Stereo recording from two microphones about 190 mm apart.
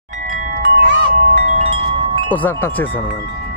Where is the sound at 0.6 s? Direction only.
45° right (ahead or behind).